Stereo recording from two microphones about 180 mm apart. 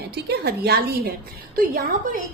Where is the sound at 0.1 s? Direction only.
60° right (ahead or behind).